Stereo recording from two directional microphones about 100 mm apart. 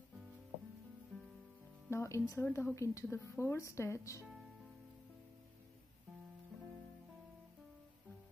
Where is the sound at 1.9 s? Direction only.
30° left (ahead or behind).